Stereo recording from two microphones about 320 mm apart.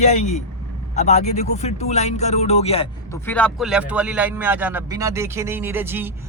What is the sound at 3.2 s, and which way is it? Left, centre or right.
A man's voice, centre.